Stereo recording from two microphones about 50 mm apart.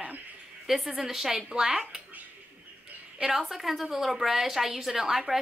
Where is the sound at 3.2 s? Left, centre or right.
Centre.